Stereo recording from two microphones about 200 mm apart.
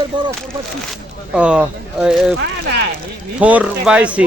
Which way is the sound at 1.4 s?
5° right (ahead or behind).